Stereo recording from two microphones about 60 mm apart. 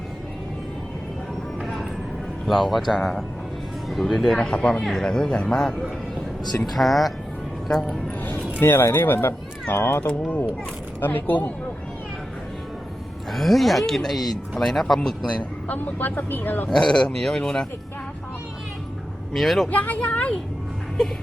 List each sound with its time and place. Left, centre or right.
1.6 s vehicle: centre
2.5 s speech: centre
8.6 s speech: left
10.1 s speech: centre
11.0 s speech: left
13.3 s speech: centre
15.3 s speech: left
16.6 s speech: centre
19.3 s speech: centre
19.7 s speech: left